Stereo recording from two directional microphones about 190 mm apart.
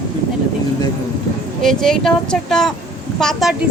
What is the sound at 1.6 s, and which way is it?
A woman's voice, centre (ahead or behind).